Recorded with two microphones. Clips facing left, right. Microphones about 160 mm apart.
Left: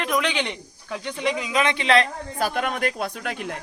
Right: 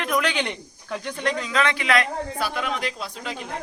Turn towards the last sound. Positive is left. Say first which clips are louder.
# left 4 dB
turn(degrees=60)  # may be behind; listen again after turning